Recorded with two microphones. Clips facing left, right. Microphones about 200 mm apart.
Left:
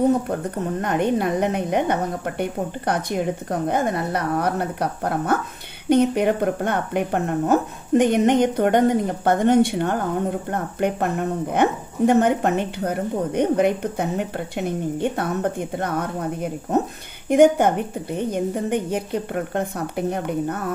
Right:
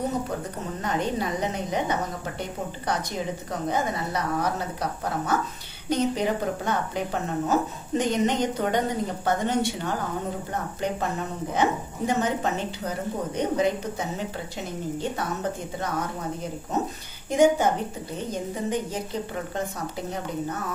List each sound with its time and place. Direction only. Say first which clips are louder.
0.3 s a woman's voice: left 7 dB; 55° left (ahead or behind)